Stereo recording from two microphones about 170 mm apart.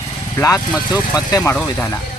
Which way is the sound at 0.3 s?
15° left (ahead or behind).